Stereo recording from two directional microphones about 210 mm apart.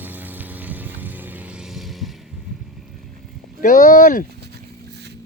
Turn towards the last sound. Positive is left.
turn(degrees=40)  # may be behind; listen again after turning